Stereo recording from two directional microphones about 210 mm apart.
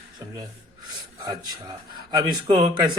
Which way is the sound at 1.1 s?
20° right (ahead or behind).